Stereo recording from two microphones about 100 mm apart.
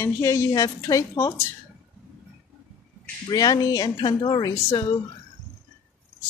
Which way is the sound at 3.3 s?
40° left (ahead or behind).